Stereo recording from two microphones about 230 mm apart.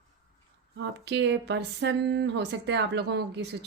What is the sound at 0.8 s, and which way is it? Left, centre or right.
Speech, right.